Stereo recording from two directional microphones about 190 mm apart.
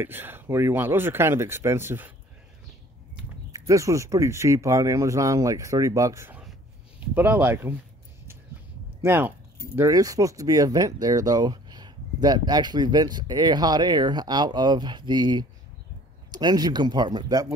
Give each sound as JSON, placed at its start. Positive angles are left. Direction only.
{"t": 0.0, "sound": "speech", "side_deg": -10}
{"t": 3.5, "sound": "speech", "side_deg": -15}
{"t": 9.0, "sound": "speech", "side_deg": -10}